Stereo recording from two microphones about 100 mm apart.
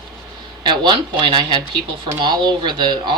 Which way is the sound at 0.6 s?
50° right (ahead or behind).